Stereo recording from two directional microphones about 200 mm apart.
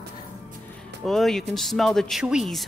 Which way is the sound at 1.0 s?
Centre (ahead or behind).